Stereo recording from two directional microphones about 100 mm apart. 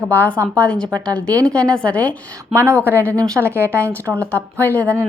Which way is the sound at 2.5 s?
25° right (ahead or behind).